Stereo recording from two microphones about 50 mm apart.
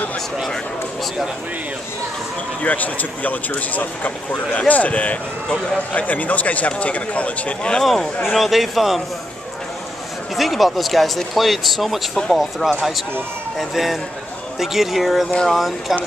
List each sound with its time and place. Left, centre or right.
2.6 s speech: left
7.8 s speech: centre
10.3 s speech: centre